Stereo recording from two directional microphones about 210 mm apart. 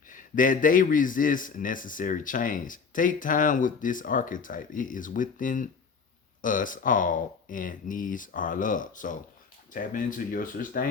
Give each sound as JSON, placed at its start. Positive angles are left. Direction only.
{"t": 0.1, "sound": "a man's voice", "side_deg": 40}